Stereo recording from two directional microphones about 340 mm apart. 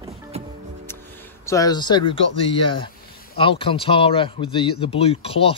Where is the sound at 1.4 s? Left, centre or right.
Centre.